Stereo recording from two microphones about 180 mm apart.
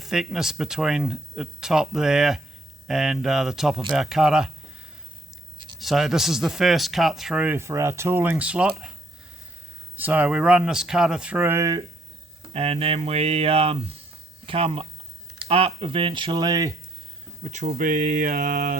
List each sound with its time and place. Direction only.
0.0 s speech: 5° right (ahead or behind)
5.8 s speech: centre (ahead or behind); by 11.8 s 15° right (ahead or behind)
12.5 s speech: 35° right (ahead or behind)
17.4 s speech: 40° right (ahead or behind)